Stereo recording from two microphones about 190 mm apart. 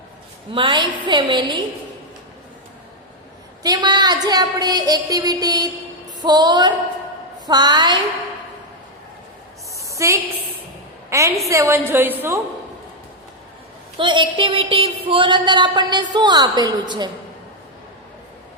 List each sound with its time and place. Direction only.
0.5 s a woman's voice: 25° right (ahead or behind)
3.6 s a woman's voice: 20° right (ahead or behind)
9.7 s a sound: 15° right (ahead or behind)
11.1 s a woman's voice: 15° right (ahead or behind)
14.0 s a woman's voice: 25° right (ahead or behind)